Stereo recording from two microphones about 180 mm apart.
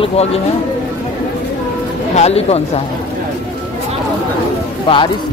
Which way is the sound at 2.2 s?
35° left (ahead or behind).